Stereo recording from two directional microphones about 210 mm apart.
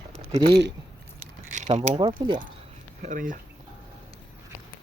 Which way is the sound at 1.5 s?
35° right (ahead or behind).